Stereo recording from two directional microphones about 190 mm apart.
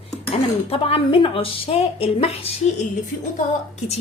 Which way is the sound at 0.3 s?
30° left (ahead or behind).